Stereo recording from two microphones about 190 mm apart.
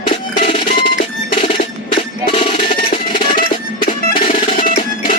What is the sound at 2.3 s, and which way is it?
Percussion, 25° left (ahead or behind).